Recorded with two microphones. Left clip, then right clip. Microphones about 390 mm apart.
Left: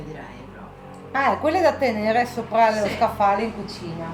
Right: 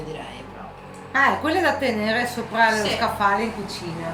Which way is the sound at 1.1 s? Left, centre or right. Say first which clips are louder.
Right 1 dB; centre.